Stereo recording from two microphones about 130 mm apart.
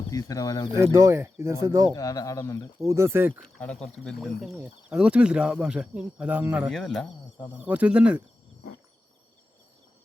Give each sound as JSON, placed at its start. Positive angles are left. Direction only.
{"t": 0.1, "sound": "speech", "side_deg": 25}
{"t": 0.8, "sound": "speech", "side_deg": -20}
{"t": 1.9, "sound": "speech", "side_deg": 25}
{"t": 2.8, "sound": "speech", "side_deg": -20}
{"t": 3.4, "sound": "speech", "side_deg": 10}
{"t": 4.4, "sound": "speech", "side_deg": -5}
{"t": 6.7, "sound": "speech", "side_deg": 5}
{"t": 7.6, "sound": "speech", "side_deg": -10}